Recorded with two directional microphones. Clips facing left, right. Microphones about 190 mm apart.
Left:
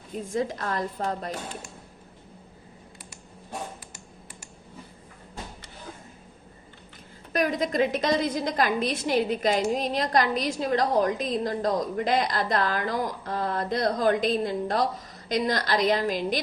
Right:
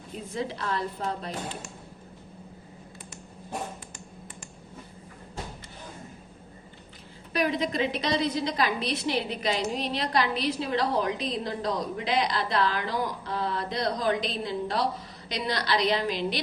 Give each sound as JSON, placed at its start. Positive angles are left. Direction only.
{"t": 0.3, "sound": "a woman's voice", "side_deg": 45}
{"t": 7.3, "sound": "a woman's voice", "side_deg": 45}